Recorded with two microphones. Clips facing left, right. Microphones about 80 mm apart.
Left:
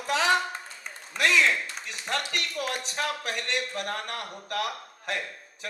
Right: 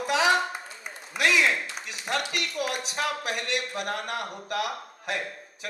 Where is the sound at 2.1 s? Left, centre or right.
Left.